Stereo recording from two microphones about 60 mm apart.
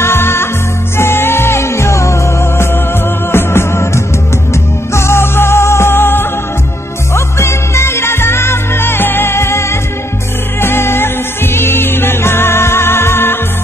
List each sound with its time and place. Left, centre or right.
0.0 s music: left
3.3 s music: left